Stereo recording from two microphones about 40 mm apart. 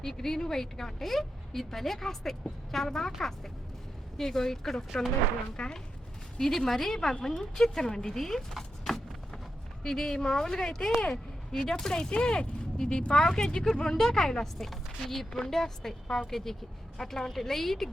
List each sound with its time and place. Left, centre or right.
0.0 s speech: centre
5.6 s speech: left
6.4 s speech: centre